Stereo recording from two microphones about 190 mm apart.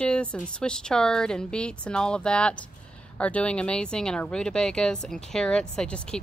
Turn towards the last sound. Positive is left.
turn(degrees=5)  # may be behind; listen again after turning